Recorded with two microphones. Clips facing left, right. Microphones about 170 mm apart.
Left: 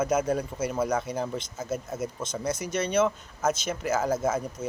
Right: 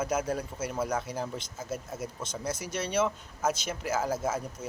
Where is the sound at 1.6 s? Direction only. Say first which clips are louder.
Left 4 dB; 50° left (ahead or behind).